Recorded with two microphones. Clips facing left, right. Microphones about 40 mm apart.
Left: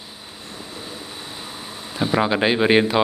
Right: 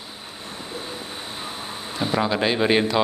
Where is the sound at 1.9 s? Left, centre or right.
Centre.